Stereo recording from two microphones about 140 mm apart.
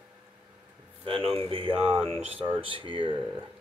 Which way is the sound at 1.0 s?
40° right (ahead or behind).